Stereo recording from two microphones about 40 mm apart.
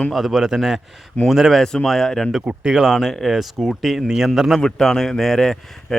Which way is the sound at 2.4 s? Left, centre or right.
Right.